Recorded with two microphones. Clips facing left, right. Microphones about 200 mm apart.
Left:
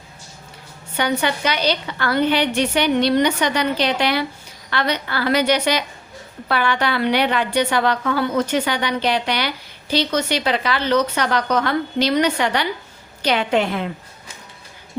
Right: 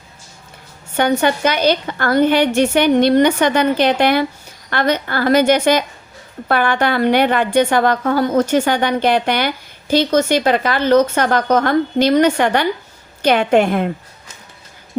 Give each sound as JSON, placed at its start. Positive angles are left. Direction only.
{"t": 0.9, "sound": "a woman's voice", "side_deg": -50}